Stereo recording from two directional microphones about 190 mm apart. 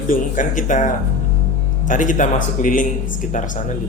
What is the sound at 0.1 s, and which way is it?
Speech, 45° left (ahead or behind).